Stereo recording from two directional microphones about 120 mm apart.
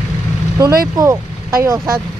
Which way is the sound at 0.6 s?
30° right (ahead or behind).